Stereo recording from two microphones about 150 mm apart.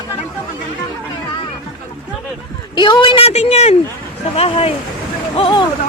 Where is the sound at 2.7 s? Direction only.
30° left (ahead or behind).